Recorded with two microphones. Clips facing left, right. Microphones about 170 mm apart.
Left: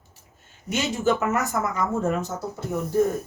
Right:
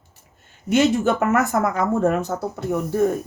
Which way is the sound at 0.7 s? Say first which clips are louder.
Right 6 dB; 60° right (ahead or behind).